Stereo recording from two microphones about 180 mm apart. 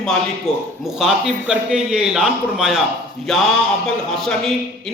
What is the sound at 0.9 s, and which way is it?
A man's voice, 5° right (ahead or behind).